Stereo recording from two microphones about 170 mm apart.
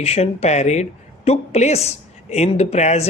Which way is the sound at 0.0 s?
40° left (ahead or behind).